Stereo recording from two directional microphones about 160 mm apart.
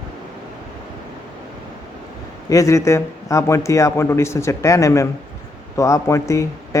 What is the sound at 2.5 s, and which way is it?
A man's voice, 20° left (ahead or behind).